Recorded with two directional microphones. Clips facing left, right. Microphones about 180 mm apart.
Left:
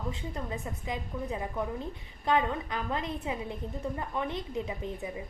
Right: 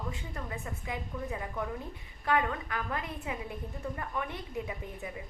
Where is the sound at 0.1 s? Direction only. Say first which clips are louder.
Left 4 dB; 20° left (ahead or behind).